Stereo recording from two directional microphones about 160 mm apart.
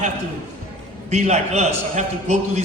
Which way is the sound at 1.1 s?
45° right (ahead or behind).